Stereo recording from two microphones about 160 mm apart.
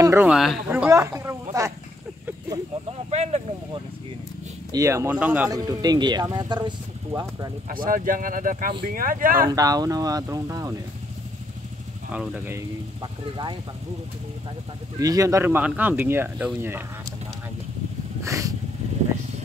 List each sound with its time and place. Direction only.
0.0 s a sound: 20° right (ahead or behind)
0.3 s speech: centre (ahead or behind)
0.7 s speech: 15° right (ahead or behind)
2.9 s speech: 40° right (ahead or behind)
4.7 s speech: 20° right (ahead or behind)
5.5 s speech: 25° right (ahead or behind)
7.6 s speech: 60° right (ahead or behind)
9.5 s speech: 25° right (ahead or behind)
12.1 s speech: 10° right (ahead or behind)
13.0 s speech: 30° right (ahead or behind)
15.0 s speech: 20° right (ahead or behind)
18.2 s a sound: 20° right (ahead or behind)